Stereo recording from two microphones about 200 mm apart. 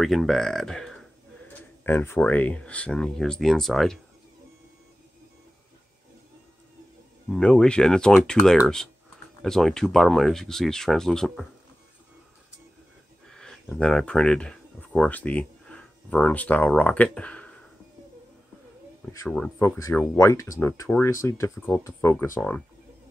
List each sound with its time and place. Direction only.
0.0 s speech: centre (ahead or behind)
7.2 s speech: 5° left (ahead or behind)
13.3 s speech: 5° left (ahead or behind)
19.3 s speech: 10° left (ahead or behind)